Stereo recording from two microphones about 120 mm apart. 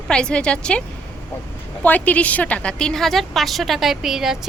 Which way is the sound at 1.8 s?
10° left (ahead or behind).